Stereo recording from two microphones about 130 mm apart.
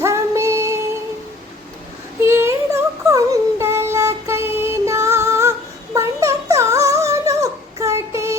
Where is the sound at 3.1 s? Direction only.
25° right (ahead or behind).